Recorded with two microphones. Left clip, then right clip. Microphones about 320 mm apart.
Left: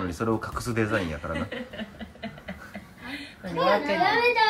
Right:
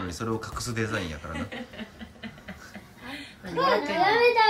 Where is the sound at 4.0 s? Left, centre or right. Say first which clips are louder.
Right 1 dB; right.